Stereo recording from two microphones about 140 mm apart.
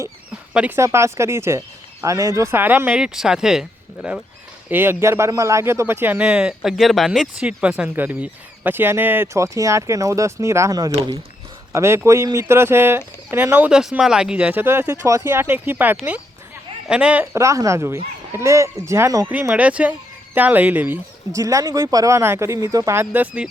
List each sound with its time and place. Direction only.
0.8 s a man's voice: 20° right (ahead or behind)
17.3 s speech: 20° right (ahead or behind)
19.3 s a man's voice: 10° right (ahead or behind)